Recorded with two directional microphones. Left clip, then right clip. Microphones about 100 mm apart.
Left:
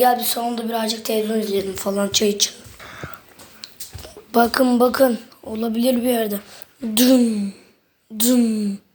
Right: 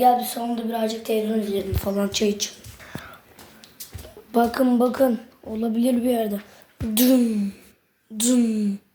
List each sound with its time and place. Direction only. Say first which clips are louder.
0.0 s a woman's voice: left 1 dB; 35° left (ahead or behind); by 2.9 s 20° left (ahead or behind)
4.3 s a woman's voice: left 4 dB; 25° left (ahead or behind); by 7.5 s 45° left (ahead or behind)
8.2 s speech: left 3 dB; 35° left (ahead or behind)